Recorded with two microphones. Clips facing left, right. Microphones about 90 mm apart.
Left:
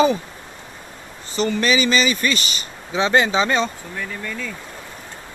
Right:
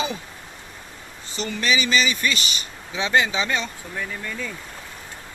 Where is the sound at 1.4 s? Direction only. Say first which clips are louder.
Left 5 dB; 45° left (ahead or behind).